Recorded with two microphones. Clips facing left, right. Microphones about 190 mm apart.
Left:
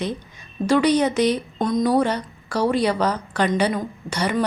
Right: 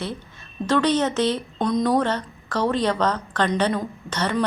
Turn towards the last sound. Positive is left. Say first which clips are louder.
# left 1 dB
turn(degrees=10)  # may be behind; listen again after turning